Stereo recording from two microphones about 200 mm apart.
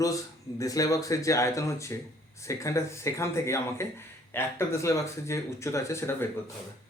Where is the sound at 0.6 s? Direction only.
15° left (ahead or behind).